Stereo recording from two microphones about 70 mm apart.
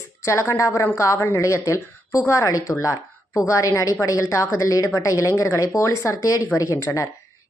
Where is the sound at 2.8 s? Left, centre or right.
Left.